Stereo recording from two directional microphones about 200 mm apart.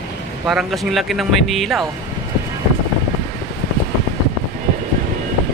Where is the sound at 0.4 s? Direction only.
Centre (ahead or behind).